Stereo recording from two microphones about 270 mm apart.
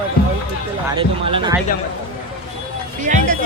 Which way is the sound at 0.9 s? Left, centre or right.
Centre.